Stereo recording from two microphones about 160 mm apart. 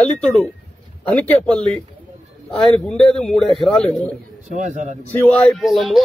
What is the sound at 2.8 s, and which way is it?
Speech, centre (ahead or behind).